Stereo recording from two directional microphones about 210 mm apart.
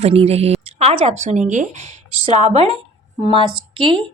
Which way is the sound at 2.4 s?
30° right (ahead or behind).